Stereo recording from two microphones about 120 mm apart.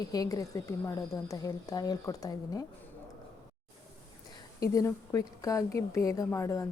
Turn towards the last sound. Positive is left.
turn(degrees=25)  # may be behind; listen again after turning